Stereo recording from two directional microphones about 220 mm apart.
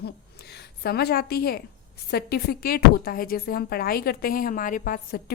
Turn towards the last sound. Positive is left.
turn(degrees=40)  # may be behind; listen again after turning